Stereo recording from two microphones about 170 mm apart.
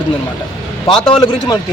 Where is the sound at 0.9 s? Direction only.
30° left (ahead or behind).